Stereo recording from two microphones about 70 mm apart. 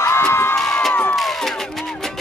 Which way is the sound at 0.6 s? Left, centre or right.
Centre.